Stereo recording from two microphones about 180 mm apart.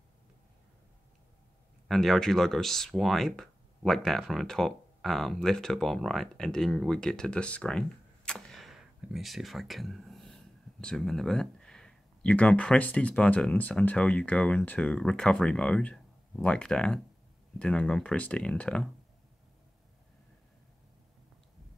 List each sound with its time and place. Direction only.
1.9 s speech: centre (ahead or behind)